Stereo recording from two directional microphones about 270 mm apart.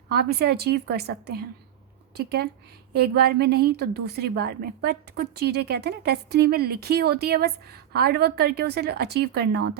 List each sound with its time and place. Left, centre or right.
0.1 s a woman's voice: right